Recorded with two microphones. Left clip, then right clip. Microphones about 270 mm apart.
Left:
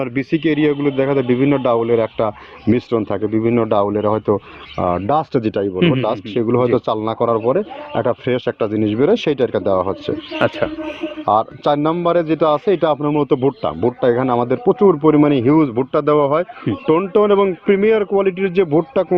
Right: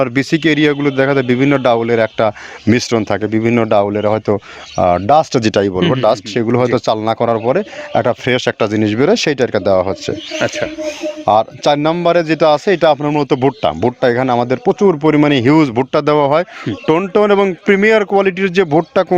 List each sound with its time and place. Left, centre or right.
0.0 s speech: right
10.3 s music: centre
11.3 s speech: right